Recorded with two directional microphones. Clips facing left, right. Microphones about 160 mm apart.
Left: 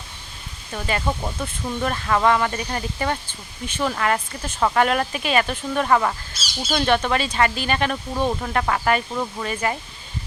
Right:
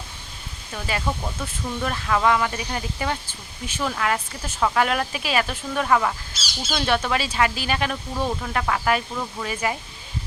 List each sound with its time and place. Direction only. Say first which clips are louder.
0.7 s speech: left 3 dB; centre (ahead or behind)
1.0 s speech: left 2 dB; 15° left (ahead or behind)
1.9 s speech: left 2 dB; centre (ahead or behind)
8.1 s speech: left 3 dB; 15° left (ahead or behind)
8.5 s speech: left 1 dB; centre (ahead or behind)